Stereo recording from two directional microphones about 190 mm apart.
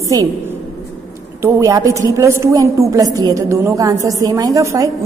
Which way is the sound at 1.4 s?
15° right (ahead or behind).